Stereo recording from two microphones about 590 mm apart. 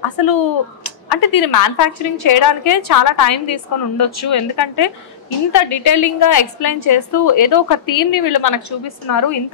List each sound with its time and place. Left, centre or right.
0.2 s a woman's voice: left